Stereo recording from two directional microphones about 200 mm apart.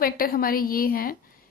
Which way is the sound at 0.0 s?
45° left (ahead or behind).